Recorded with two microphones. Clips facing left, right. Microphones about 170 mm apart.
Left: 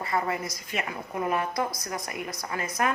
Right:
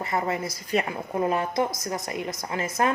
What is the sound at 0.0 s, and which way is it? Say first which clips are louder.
A woman's voice: right 2 dB; 25° right (ahead or behind).